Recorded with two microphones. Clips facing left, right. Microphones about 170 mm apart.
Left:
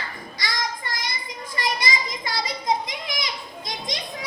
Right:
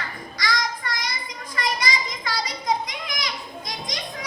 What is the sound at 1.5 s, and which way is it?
Children playing, 25° left (ahead or behind).